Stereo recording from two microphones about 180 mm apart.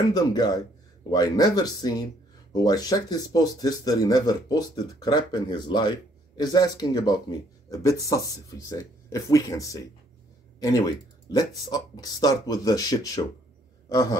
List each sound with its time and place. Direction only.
0.1 s speech: 20° left (ahead or behind)